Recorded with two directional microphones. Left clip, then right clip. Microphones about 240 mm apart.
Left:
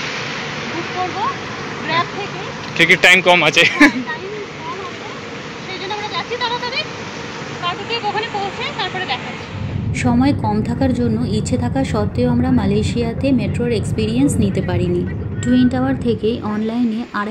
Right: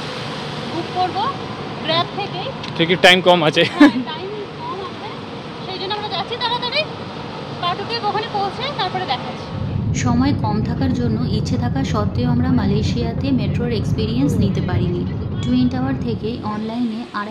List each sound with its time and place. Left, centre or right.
2.8 s speech: centre
8.7 s speech: centre
9.9 s a woman's voice: centre